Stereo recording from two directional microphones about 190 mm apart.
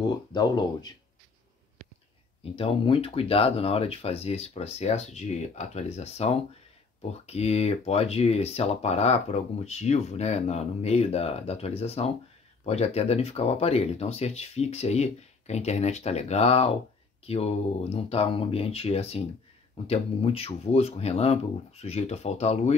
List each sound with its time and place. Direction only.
0.3 s speech: 20° left (ahead or behind)
2.4 s speech: 30° left (ahead or behind)